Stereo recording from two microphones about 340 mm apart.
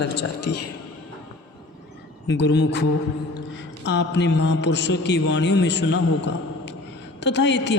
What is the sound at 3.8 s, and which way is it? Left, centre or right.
A man's voice, left.